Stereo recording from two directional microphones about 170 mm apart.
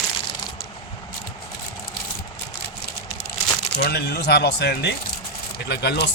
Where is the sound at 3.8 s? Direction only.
70° left (ahead or behind).